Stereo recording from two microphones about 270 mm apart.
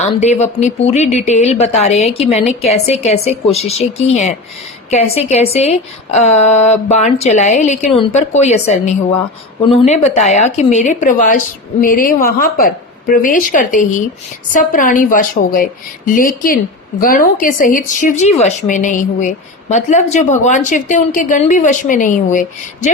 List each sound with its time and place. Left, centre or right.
0.0 s speech: left